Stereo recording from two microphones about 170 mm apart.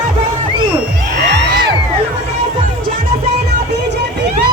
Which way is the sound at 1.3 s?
80° right.